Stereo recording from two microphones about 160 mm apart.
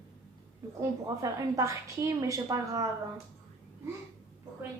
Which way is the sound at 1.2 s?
20° right (ahead or behind).